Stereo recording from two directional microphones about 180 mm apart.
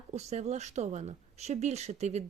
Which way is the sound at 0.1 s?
40° right (ahead or behind).